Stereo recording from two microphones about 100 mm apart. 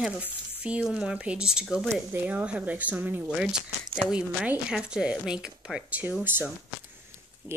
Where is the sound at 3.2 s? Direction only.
5° right (ahead or behind).